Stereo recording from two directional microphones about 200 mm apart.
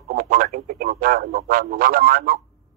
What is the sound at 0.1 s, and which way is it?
Speech, 45° right (ahead or behind).